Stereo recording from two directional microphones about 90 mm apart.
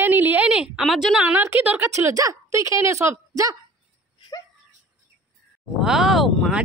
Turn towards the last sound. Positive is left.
turn(degrees=0)  # may be behind; listen again after turning